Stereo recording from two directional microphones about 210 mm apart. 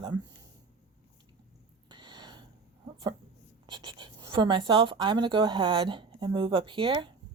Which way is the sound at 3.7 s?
20° right (ahead or behind).